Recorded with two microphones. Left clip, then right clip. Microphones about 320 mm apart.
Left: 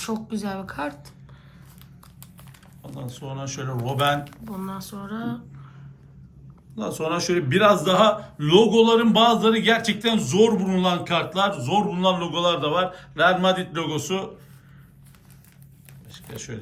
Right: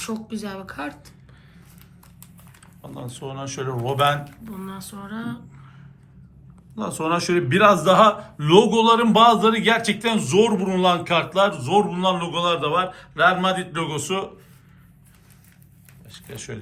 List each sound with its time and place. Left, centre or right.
0.0 s speech: left
2.8 s a man's voice: centre
4.2 s speech: centre
6.7 s a man's voice: centre
16.1 s a man's voice: centre